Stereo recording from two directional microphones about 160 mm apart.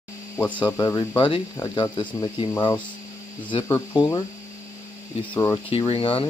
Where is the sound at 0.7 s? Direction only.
20° left (ahead or behind).